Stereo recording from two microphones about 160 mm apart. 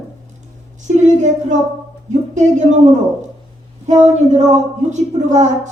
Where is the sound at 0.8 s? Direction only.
45° right (ahead or behind).